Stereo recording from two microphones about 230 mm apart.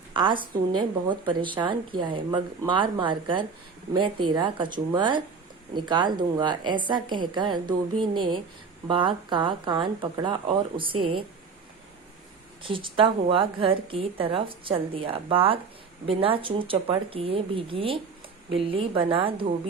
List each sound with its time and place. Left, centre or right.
0.1 s a woman's voice: right
12.6 s a woman's voice: right